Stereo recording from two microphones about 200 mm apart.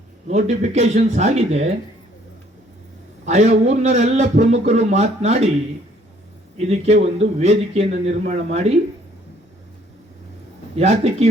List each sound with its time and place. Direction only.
0.3 s a man's voice: 35° right (ahead or behind)
3.2 s a man's voice: 35° right (ahead or behind)
6.6 s a man's voice: 30° right (ahead or behind)
10.8 s a man's voice: 30° right (ahead or behind)